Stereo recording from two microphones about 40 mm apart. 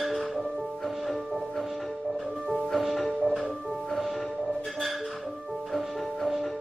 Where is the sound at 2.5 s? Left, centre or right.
Centre.